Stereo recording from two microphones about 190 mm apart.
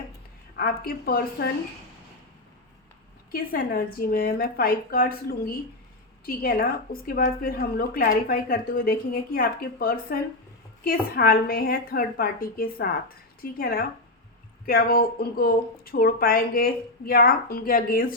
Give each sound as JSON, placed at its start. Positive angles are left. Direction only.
{"t": 0.5, "sound": "a woman's voice", "side_deg": 50}
{"t": 3.3, "sound": "a woman's voice", "side_deg": 50}